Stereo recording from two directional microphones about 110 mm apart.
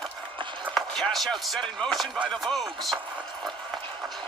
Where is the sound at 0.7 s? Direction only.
5° left (ahead or behind).